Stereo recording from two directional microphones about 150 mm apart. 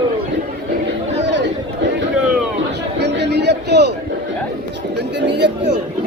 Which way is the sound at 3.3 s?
90° right.